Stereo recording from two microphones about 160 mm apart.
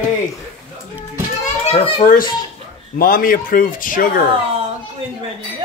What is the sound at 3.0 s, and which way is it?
Speech, 65° left (ahead or behind).